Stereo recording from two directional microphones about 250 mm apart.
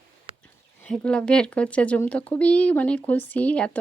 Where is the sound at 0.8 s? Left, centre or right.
Centre.